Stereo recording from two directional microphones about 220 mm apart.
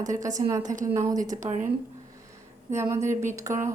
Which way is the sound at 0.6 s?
35° right (ahead or behind).